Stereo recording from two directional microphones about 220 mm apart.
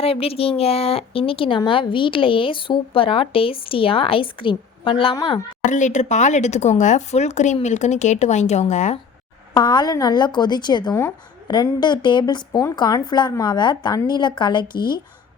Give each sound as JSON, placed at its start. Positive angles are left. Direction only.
{"t": 0.0, "sound": "speech", "side_deg": 25}
{"t": 5.6, "sound": "speech", "side_deg": 35}
{"t": 9.6, "sound": "speech", "side_deg": 20}